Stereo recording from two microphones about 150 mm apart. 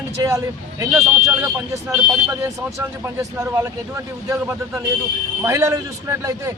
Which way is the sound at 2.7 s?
20° right (ahead or behind).